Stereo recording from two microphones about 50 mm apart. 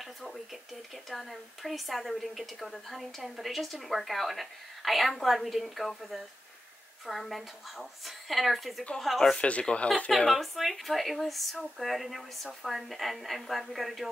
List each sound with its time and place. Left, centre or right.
0.0 s a woman's voice: centre
9.3 s speech: left
10.1 s a woman's voice: centre